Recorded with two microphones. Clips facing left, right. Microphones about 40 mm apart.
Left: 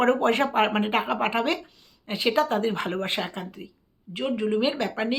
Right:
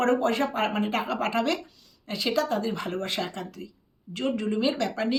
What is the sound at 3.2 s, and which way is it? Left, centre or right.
Speech, left.